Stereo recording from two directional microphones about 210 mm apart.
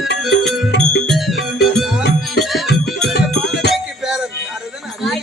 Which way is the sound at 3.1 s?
50° left (ahead or behind).